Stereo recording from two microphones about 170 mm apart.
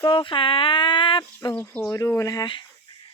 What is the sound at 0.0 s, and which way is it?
Speech, 30° left (ahead or behind).